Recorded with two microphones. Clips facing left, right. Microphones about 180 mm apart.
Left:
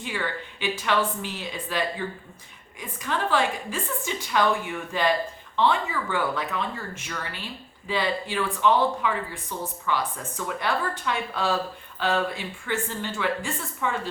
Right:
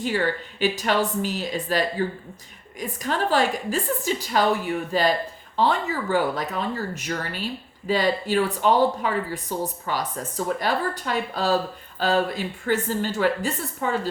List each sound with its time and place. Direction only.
0.0 s speech: 40° right (ahead or behind)